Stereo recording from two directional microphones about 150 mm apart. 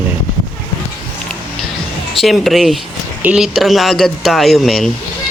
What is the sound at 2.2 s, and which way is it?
Speech, centre (ahead or behind).